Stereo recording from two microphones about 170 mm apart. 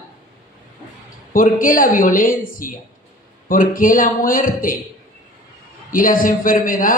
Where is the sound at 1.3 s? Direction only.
55° left (ahead or behind).